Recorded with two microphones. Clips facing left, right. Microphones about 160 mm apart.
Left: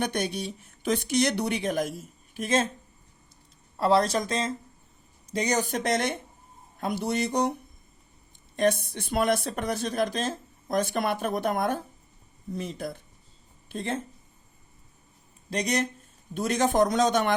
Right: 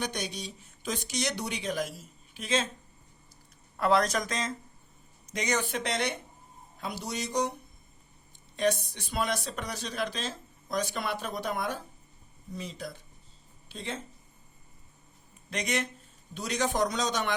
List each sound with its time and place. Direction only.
0.0 s speech: 55° left (ahead or behind)
3.8 s speech: 30° left (ahead or behind); by 7.5 s 55° left (ahead or behind)
8.8 s speech: 55° left (ahead or behind)
15.4 s speech: 35° left (ahead or behind)
16.3 s speech: 50° left (ahead or behind)